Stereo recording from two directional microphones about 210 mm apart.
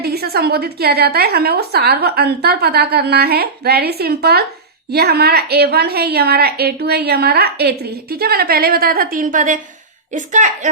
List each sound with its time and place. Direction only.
0.0 s a woman's voice: 50° right (ahead or behind)